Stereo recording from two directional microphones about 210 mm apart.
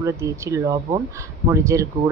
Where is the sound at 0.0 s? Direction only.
15° right (ahead or behind).